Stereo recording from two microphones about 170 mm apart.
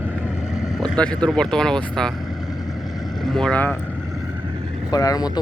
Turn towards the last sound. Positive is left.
turn(degrees=20)  # may be behind; listen again after turning